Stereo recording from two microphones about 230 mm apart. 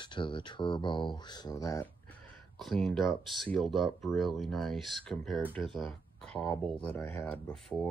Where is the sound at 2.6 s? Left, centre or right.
Centre.